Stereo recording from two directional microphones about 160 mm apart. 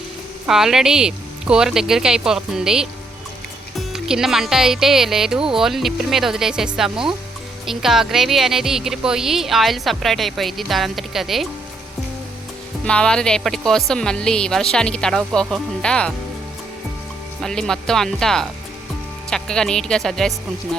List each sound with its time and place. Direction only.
0.4 s speech: centre (ahead or behind)
12.8 s speech: 5° left (ahead or behind)
17.4 s speech: 5° left (ahead or behind)